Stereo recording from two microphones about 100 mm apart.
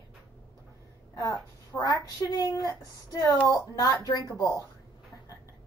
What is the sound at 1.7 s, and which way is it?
A woman's voice, 45° left (ahead or behind).